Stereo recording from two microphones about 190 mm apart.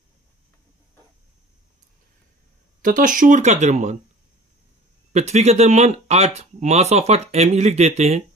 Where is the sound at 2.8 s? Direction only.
45° right (ahead or behind).